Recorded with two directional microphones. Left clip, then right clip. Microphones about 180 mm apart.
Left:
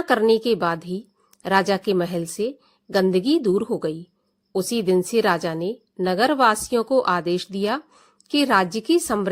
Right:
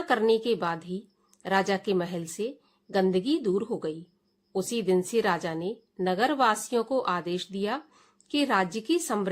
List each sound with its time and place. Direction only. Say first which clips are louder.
0.0 s a woman's voice: left 6 dB; 30° left (ahead or behind)